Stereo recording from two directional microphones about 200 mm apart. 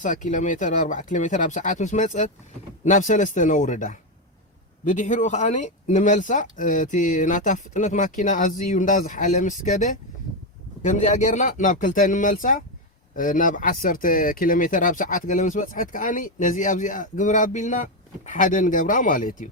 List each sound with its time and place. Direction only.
0.0 s speech: 40° left (ahead or behind)